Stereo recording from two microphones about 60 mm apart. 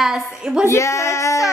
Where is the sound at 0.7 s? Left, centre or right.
Left.